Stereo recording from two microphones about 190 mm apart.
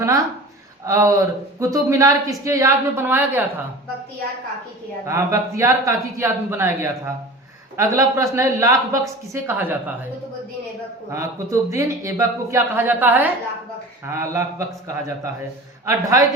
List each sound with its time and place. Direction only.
0.0 s speech: 15° right (ahead or behind)
5.0 s speech: 15° right (ahead or behind)
11.1 s speech: 15° right (ahead or behind)